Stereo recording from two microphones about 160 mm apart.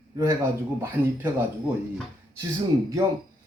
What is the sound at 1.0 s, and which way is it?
Speech, 10° right (ahead or behind).